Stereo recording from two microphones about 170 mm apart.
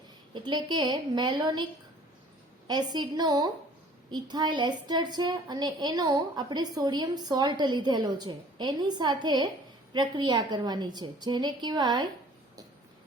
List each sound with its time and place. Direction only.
0.3 s a woman's voice: 25° right (ahead or behind)
2.6 s a woman's voice: 25° right (ahead or behind)